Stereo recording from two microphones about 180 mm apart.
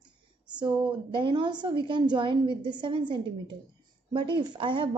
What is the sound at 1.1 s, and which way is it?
A woman's voice, 25° right (ahead or behind).